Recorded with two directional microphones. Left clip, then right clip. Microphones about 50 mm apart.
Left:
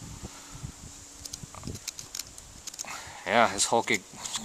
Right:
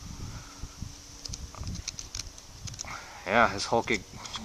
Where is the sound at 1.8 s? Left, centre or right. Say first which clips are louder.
Right 2 dB; centre.